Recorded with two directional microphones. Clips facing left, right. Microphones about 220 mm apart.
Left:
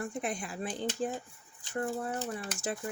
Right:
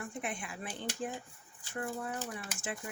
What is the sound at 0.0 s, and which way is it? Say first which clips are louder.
Speech: left 5 dB; 35° left (ahead or behind).